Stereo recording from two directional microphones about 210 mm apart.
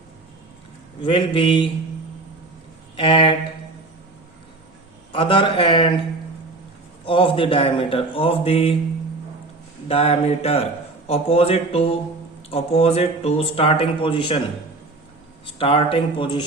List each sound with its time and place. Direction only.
1.0 s speech: 25° left (ahead or behind)
2.9 s speech: 25° left (ahead or behind)
5.1 s speech: 25° left (ahead or behind)
7.0 s speech: 25° left (ahead or behind)
9.9 s speech: 25° left (ahead or behind)
15.5 s speech: 25° left (ahead or behind)